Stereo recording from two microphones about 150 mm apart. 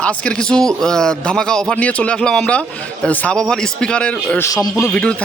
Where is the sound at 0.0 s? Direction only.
5° left (ahead or behind).